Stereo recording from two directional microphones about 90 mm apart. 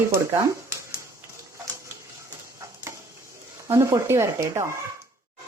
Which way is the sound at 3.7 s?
40° right (ahead or behind).